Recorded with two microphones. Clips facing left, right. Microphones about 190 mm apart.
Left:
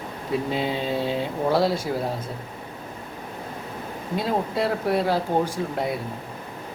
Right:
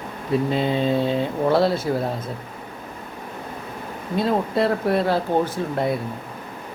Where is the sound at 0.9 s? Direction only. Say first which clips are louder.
Right 4 dB; 10° left (ahead or behind).